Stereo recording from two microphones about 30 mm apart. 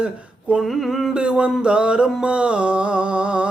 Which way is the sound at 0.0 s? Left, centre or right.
Right.